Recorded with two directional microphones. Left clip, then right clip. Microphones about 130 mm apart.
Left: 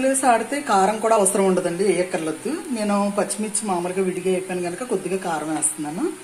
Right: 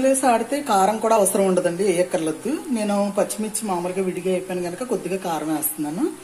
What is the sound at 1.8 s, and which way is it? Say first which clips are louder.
Speech: right 1 dB; 15° right (ahead or behind).